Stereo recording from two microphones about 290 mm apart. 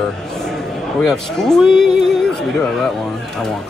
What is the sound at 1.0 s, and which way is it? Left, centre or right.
Speech, centre.